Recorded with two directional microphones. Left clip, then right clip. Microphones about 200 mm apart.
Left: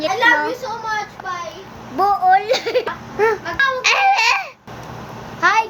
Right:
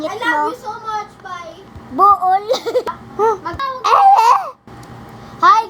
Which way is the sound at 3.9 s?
40° right (ahead or behind).